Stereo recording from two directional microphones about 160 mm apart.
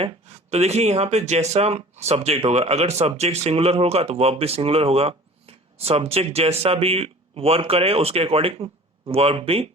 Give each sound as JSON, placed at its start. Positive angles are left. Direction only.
{"t": 0.0, "sound": "speech", "side_deg": -40}